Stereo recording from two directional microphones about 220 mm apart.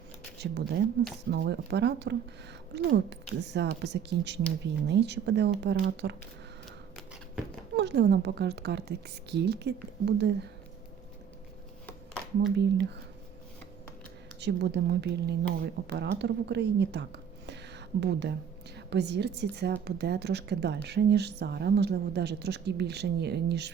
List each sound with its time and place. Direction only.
0.3 s speech: 50° right (ahead or behind)
6.9 s a sound: centre (ahead or behind)
7.8 s speech: 50° right (ahead or behind)
11.9 s a sound: 5° left (ahead or behind)
12.5 s speech: 50° right (ahead or behind)
14.4 s speech: 50° right (ahead or behind)